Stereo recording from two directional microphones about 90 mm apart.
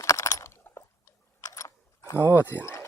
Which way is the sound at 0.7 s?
35° left (ahead or behind).